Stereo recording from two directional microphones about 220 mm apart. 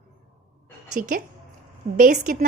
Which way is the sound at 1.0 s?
40° right (ahead or behind).